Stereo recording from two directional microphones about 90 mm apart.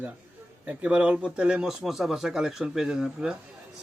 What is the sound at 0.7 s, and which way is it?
Speech, 10° right (ahead or behind).